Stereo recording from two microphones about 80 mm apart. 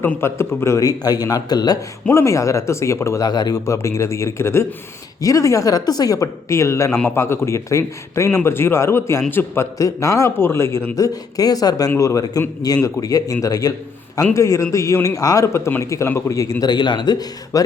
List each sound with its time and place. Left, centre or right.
0.2 s a woman's voice: left
0.8 s a man's voice: left
2.0 s a woman's voice: left
3.2 s a man's voice: left
3.7 s a woman's voice: left
9.7 s a woman's voice: left
10.9 s a man's voice: left
16.6 s a man's voice: left